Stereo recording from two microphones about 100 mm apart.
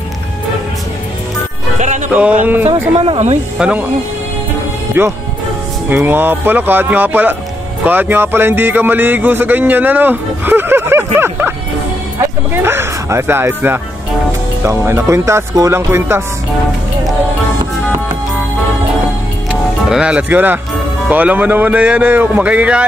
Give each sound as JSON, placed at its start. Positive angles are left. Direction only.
{"t": 2.1, "sound": "speech", "side_deg": -15}
{"t": 2.9, "sound": "speech", "side_deg": -85}
{"t": 3.5, "sound": "speech", "side_deg": -10}
{"t": 5.0, "sound": "speech", "side_deg": -25}
{"t": 12.6, "sound": "speech", "side_deg": -25}
{"t": 19.9, "sound": "speech", "side_deg": -10}